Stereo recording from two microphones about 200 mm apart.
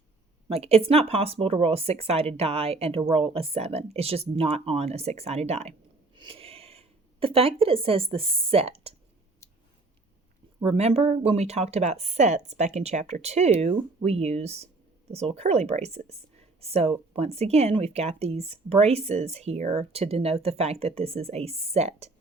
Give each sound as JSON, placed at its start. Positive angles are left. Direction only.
{"t": 0.4, "sound": "speech", "side_deg": -30}
{"t": 10.6, "sound": "speech", "side_deg": -30}